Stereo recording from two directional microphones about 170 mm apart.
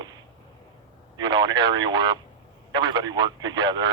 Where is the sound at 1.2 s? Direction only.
25° right (ahead or behind).